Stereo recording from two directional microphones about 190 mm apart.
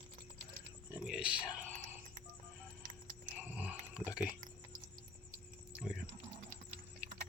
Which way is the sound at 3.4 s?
10° right (ahead or behind).